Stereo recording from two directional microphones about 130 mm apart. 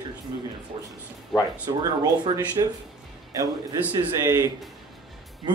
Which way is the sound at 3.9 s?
25° right (ahead or behind).